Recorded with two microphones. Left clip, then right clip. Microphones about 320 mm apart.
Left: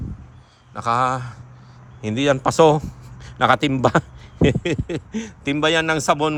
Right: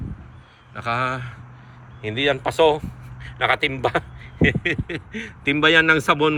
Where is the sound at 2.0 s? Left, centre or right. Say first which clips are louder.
Left 2 dB; left.